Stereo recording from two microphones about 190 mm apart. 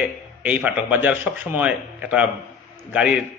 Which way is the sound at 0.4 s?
10° right (ahead or behind).